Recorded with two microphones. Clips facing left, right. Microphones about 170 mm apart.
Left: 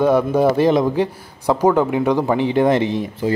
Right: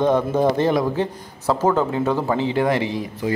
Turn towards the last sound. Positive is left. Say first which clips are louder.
# left 4 dB
turn(degrees=25)  # may be behind; listen again after turning